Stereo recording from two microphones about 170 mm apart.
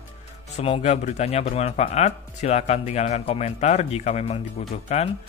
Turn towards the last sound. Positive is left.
turn(degrees=40)  # may be behind; listen again after turning